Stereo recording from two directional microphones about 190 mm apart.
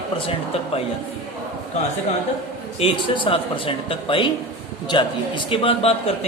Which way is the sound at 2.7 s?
30° left (ahead or behind).